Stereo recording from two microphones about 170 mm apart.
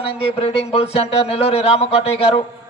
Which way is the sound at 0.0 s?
35° left (ahead or behind).